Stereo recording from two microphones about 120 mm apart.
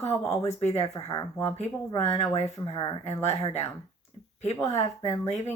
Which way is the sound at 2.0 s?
60° left (ahead or behind).